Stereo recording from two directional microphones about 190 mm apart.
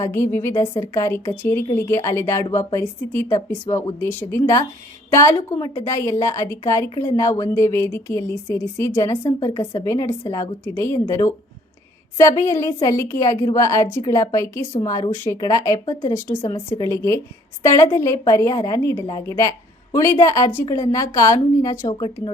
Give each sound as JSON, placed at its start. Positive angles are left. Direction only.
{"t": 0.0, "sound": "a woman's voice", "side_deg": 15}
{"t": 16.4, "sound": "a woman's voice", "side_deg": 25}